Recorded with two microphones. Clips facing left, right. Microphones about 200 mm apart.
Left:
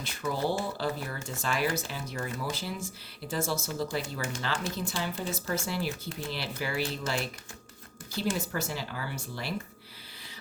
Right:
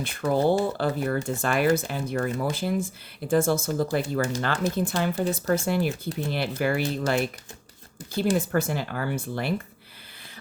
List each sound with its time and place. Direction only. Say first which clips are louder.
0.0 s speech: right 8 dB; 55° right (ahead or behind)
8.4 s speech: right 8 dB; 55° right (ahead or behind)